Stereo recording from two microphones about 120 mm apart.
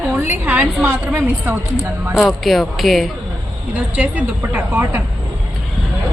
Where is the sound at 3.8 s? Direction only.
10° right (ahead or behind).